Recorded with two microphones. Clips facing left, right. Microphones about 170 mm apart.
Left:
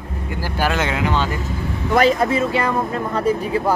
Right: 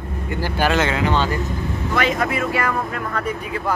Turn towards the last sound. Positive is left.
turn(degrees=30)  # may be behind; listen again after turning